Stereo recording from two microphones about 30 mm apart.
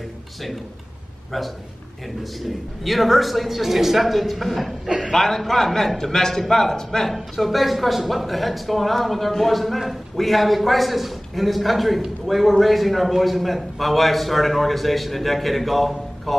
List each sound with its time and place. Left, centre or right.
2.8 s speech: centre
4.8 s a man's voice: right
5.1 s a man's voice: centre
7.3 s speech: centre